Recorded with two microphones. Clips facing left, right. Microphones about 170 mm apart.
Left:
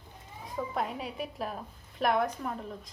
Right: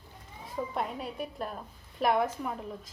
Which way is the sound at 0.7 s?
Centre (ahead or behind).